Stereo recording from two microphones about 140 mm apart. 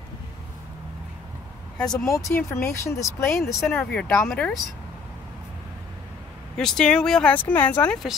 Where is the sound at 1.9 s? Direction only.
20° left (ahead or behind).